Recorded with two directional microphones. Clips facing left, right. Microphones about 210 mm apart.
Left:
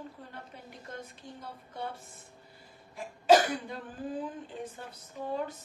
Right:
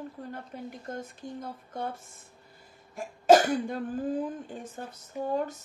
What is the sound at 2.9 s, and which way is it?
Cough, 45° right (ahead or behind).